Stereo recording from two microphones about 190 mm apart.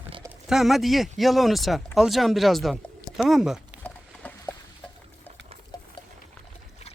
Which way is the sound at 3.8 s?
10° left (ahead or behind).